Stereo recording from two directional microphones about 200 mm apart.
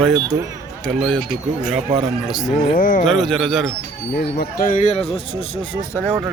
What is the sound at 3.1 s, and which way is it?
Speech, centre (ahead or behind).